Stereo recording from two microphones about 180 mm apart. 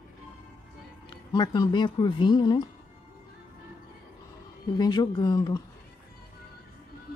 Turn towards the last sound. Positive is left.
turn(degrees=20)  # may be behind; listen again after turning